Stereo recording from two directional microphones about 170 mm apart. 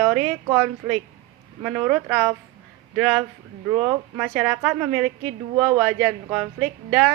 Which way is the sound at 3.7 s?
15° right (ahead or behind).